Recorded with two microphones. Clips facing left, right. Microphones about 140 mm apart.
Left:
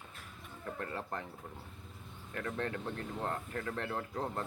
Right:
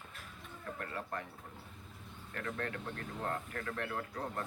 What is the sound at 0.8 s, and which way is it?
Speech, 25° left (ahead or behind).